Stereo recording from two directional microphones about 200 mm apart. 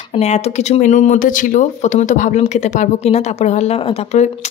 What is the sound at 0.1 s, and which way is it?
Speech, 30° left (ahead or behind).